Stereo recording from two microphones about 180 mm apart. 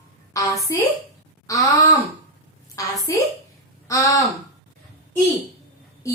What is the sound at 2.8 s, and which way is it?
A woman's voice, 20° left (ahead or behind).